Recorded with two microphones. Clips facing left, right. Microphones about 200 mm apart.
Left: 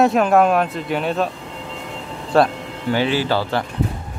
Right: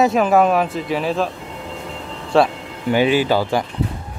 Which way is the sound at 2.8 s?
15° right (ahead or behind).